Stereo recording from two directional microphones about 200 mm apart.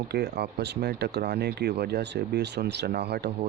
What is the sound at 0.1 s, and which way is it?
Speech, 55° right (ahead or behind).